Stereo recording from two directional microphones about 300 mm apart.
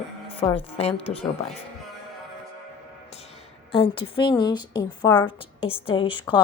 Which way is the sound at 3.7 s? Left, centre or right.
Centre.